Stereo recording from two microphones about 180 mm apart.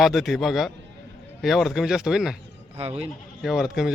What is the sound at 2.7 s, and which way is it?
Speech, 35° right (ahead or behind).